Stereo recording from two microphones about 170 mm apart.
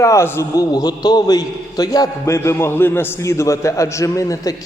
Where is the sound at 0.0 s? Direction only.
15° left (ahead or behind).